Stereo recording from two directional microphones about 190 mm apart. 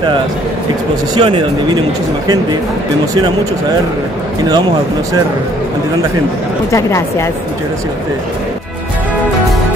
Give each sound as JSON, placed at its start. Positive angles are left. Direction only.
{"t": 1.1, "sound": "speech", "side_deg": -25}
{"t": 6.7, "sound": "a woman's voice", "side_deg": 15}